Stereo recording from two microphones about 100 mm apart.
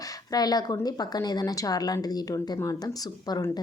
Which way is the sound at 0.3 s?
40° left (ahead or behind).